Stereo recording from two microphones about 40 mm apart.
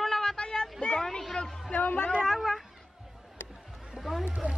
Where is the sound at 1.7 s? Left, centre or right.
Left.